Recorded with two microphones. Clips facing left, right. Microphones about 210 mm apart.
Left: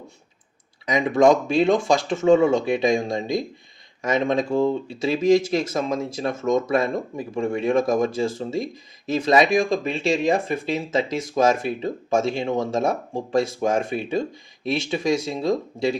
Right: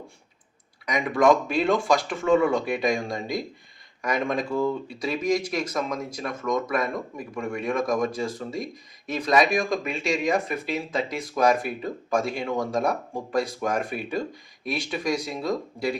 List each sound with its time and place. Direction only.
0.9 s speech: 25° left (ahead or behind)